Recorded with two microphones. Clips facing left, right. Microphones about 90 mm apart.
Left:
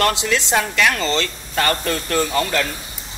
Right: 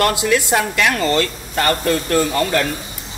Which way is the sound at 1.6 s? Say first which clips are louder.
Right 3 dB; 40° right (ahead or behind).